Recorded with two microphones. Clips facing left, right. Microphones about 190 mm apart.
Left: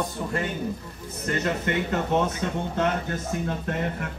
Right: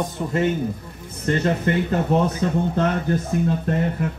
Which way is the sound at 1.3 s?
30° right (ahead or behind).